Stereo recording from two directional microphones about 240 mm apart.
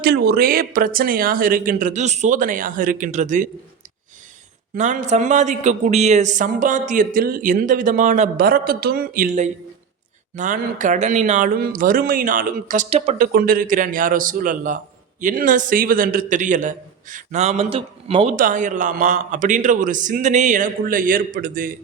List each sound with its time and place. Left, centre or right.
0.0 s speech: right
4.7 s speech: right
18.3 s speech: right